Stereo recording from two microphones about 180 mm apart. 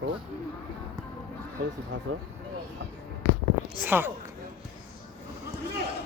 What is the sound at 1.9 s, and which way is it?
Speech, 90° right.